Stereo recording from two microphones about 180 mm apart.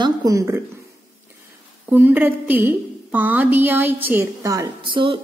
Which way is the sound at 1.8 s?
10° right (ahead or behind).